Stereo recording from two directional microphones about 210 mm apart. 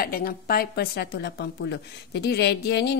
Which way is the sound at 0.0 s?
45° left (ahead or behind).